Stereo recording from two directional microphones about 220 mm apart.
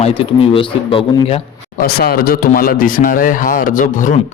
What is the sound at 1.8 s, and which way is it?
A man's voice, 45° left (ahead or behind).